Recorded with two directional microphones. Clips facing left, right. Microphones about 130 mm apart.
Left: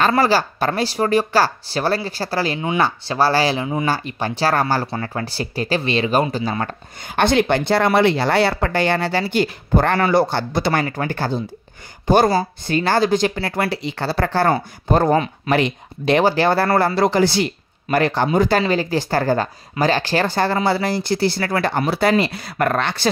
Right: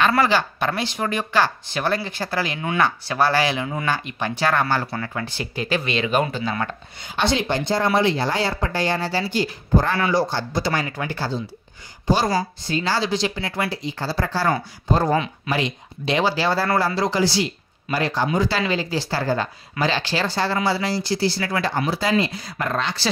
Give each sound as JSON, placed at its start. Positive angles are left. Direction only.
{"t": 0.1, "sound": "speech", "side_deg": 35}
{"t": 7.2, "sound": "speech", "side_deg": 55}
{"t": 9.9, "sound": "speech", "side_deg": 45}
{"t": 10.2, "sound": "speech", "side_deg": 60}
{"t": 13.7, "sound": "speech", "side_deg": 70}